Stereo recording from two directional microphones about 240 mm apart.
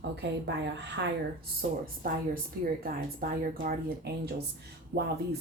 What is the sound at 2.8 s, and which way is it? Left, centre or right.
Speech, right.